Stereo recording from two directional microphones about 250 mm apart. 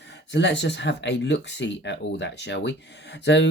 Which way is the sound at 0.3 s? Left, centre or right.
Left.